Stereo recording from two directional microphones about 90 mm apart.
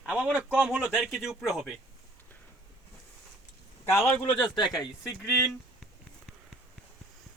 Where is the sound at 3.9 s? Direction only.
25° left (ahead or behind).